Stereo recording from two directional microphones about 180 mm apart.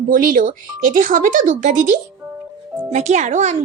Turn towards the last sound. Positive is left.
turn(degrees=-40)  # may be behind; listen again after turning